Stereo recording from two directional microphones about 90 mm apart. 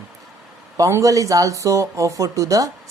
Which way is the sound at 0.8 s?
35° right (ahead or behind).